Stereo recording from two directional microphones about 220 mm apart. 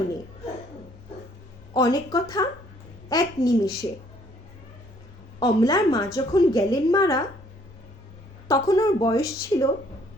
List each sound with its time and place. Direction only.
1.7 s a woman's voice: 15° left (ahead or behind)
5.4 s a woman's voice: 15° left (ahead or behind)
8.4 s a woman's voice: 15° left (ahead or behind)